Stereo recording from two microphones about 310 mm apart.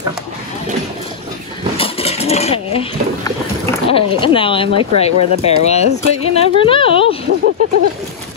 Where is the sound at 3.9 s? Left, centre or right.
Centre.